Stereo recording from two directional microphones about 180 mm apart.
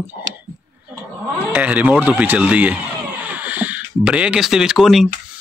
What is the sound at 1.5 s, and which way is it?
Speech, 10° right (ahead or behind).